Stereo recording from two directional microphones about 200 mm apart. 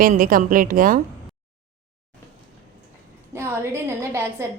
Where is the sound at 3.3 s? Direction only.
15° right (ahead or behind).